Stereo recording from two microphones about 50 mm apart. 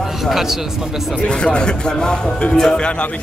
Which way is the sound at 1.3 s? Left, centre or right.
Centre.